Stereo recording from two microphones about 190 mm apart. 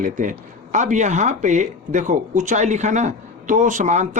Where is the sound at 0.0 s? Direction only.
40° right (ahead or behind).